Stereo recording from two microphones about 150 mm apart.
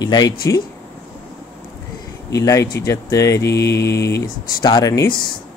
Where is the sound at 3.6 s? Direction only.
90° left.